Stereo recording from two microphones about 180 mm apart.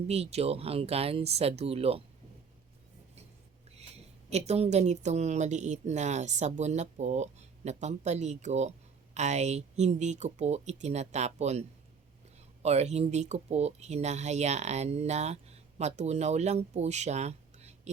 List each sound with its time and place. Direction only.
0.1 s speech: 35° right (ahead or behind)
3.8 s speech: 35° right (ahead or behind)
12.6 s speech: 35° right (ahead or behind)